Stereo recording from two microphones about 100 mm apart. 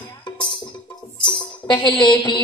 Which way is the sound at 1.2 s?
50° left (ahead or behind).